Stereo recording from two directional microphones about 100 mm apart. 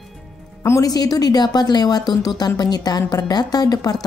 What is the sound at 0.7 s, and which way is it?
A woman's voice, 35° left (ahead or behind).